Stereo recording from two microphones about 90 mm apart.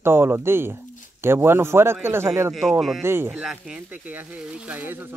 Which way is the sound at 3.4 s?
10° right (ahead or behind).